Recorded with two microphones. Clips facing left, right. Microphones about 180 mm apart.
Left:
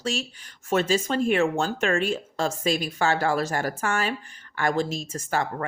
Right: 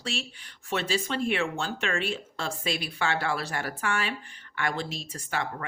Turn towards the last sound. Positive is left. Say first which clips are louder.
# left 6 dB
turn(degrees=45)  # may be behind; listen again after turning